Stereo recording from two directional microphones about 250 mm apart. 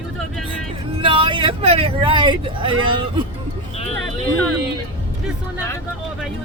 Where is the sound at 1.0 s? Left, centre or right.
Right.